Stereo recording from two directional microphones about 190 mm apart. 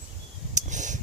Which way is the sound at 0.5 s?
40° right (ahead or behind).